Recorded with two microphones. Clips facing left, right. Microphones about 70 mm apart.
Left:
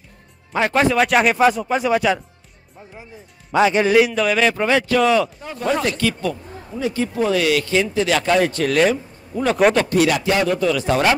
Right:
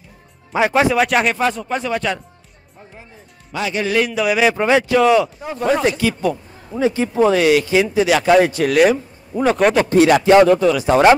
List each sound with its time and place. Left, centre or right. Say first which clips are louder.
0.5 s speech: right 2 dB; centre
3.5 s speech: left 7 dB; left
4.1 s speech: right 2 dB; centre
6.8 s speech: right 5 dB; right; by 8.9 s centre
8.9 s a sound: right 3 dB; centre
9.5 s speech: even; centre
9.8 s speech: right 6 dB; right
10.6 s speech: right 5 dB; centre